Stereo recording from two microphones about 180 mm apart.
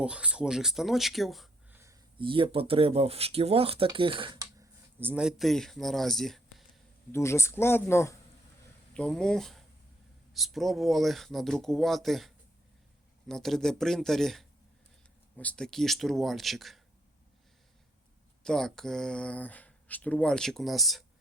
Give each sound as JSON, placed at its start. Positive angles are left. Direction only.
{"t": 0.0, "sound": "speech", "side_deg": -5}
{"t": 1.7, "sound": "a sound", "side_deg": -15}
{"t": 2.1, "sound": "speech", "side_deg": -30}
{"t": 4.4, "sound": "speech", "side_deg": -15}
{"t": 7.1, "sound": "speech", "side_deg": 15}
{"t": 18.4, "sound": "speech", "side_deg": 5}